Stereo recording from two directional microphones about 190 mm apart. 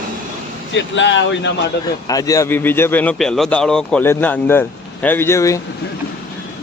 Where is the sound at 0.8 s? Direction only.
75° left (ahead or behind).